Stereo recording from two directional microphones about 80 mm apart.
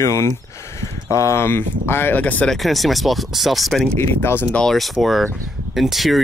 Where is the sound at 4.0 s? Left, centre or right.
Left.